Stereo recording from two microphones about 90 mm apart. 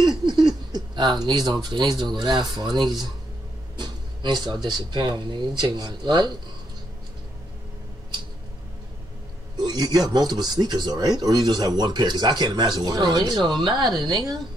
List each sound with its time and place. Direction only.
0.0 s a sound: 55° right (ahead or behind)
0.7 s speech: 50° right (ahead or behind)
9.6 s speech: 55° right (ahead or behind)
14.0 s speech: 45° right (ahead or behind)